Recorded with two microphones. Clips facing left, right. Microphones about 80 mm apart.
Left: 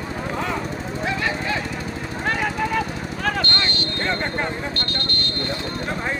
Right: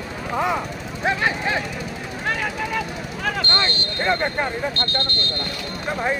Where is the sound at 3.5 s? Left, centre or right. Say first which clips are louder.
Right 1 dB; right.